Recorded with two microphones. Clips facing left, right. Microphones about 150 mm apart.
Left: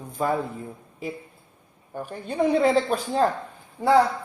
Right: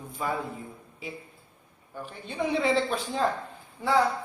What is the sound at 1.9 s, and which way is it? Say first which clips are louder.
Speech: left 7 dB; 45° left (ahead or behind).